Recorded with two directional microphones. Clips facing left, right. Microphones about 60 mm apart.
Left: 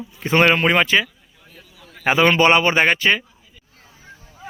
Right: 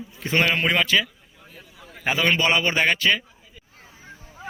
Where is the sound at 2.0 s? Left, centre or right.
Left.